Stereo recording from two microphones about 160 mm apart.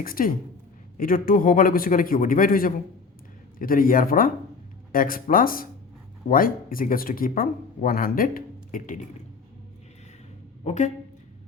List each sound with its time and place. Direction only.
0.0 s speech: 65° left (ahead or behind)
10.6 s speech: 45° left (ahead or behind)